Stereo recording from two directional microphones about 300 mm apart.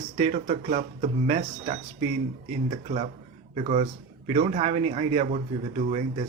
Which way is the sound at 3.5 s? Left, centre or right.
Right.